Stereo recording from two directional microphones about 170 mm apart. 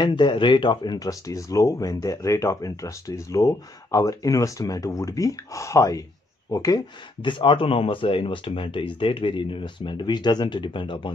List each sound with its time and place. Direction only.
0.0 s speech: 30° left (ahead or behind)